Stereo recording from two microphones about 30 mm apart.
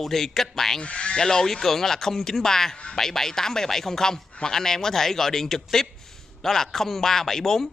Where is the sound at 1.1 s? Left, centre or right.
Left.